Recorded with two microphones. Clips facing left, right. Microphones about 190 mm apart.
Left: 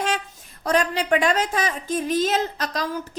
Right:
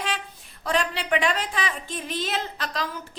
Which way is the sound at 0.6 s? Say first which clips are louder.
Left 4 dB; 45° left (ahead or behind).